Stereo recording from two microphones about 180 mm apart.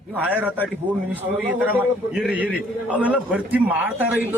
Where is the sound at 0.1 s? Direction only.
10° right (ahead or behind).